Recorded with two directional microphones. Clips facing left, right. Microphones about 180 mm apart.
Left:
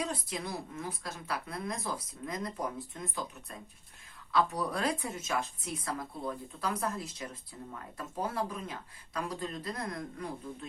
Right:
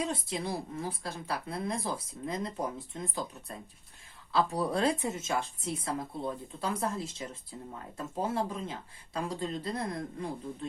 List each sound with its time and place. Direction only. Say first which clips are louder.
0.0 s a woman's voice: right 3 dB; 25° right (ahead or behind)
4.3 s a woman's voice: right 1 dB; 30° right (ahead or behind)